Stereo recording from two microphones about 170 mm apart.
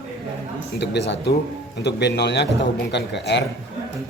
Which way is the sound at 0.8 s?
85° left.